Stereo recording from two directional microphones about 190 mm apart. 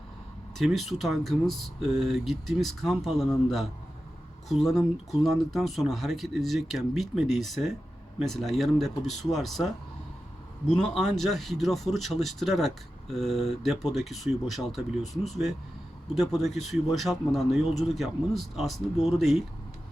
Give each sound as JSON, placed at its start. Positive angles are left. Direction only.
{"t": 0.6, "sound": "speech", "side_deg": 0}